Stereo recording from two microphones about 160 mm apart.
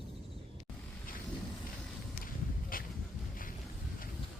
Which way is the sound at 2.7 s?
60° left (ahead or behind).